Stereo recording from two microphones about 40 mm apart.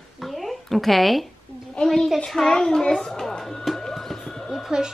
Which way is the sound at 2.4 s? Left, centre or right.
Centre.